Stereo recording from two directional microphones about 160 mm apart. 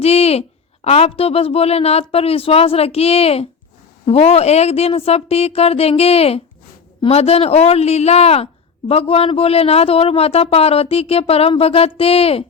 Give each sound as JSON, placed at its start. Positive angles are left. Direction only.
{"t": 0.0, "sound": "a man's voice", "side_deg": 40}